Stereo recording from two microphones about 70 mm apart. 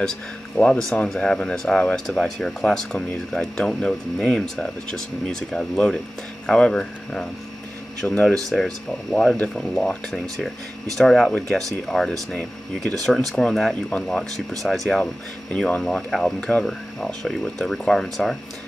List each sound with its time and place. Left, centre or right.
0.6 s speech: centre
14.6 s speech: centre
15.5 s speech: centre